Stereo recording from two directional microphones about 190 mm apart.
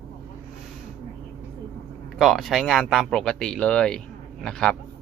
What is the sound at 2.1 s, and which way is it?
Speech, centre (ahead or behind).